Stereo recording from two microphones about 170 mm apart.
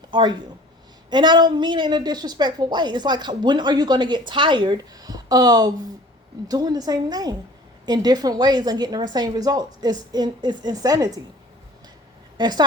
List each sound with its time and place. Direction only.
0.1 s a woman's voice: 25° right (ahead or behind)
12.4 s a woman's voice: 25° right (ahead or behind)